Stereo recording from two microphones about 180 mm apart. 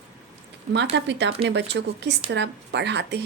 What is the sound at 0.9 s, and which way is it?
A woman's voice, 75° right (ahead or behind).